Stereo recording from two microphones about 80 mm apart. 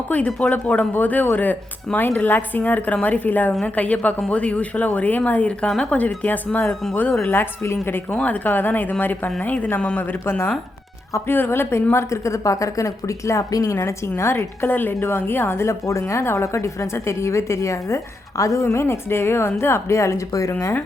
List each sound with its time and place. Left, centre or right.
0.1 s speech: centre
6.0 s speech: left
8.1 s a woman's voice: centre; by 20.7 s left